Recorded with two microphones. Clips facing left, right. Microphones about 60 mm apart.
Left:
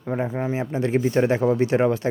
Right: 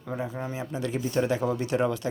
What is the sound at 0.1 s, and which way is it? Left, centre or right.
Speech, left.